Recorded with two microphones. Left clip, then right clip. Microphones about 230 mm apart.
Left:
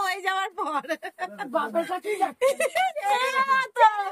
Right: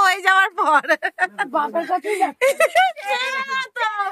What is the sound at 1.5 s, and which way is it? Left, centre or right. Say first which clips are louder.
Speech: right 5 dB; centre.